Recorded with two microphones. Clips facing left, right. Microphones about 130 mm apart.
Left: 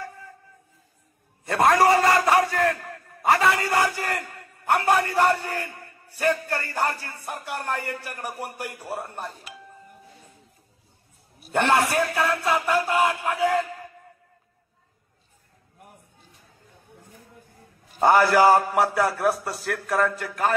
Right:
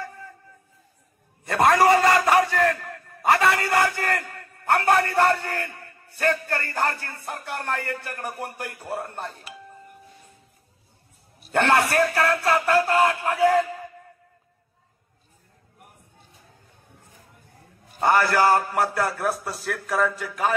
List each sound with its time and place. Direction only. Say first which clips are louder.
1.6 s a man's voice: even; centre (ahead or behind)
1.9 s a sound: right 1 dB; 20° left (ahead or behind)
2.3 s battle cry: right 1 dB; 15° left (ahead or behind)
3.2 s a man's voice: even; centre (ahead or behind)
3.5 s a man's voice: right 1 dB; 15° left (ahead or behind)
11.3 s a man's voice: right 1 dB; 5° left (ahead or behind)
12.8 s a man's voice: right 2 dB; 15° left (ahead or behind)
13.3 s a man's voice: right 3 dB; centre (ahead or behind)
18.0 s a man's voice: left 3 dB; 15° left (ahead or behind)